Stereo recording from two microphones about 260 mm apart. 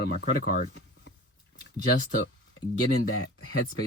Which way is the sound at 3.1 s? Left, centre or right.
Left.